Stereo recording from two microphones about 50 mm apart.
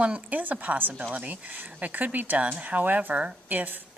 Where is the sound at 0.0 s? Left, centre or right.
Right.